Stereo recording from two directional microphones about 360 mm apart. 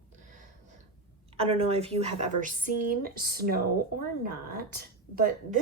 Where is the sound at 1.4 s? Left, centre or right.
Centre.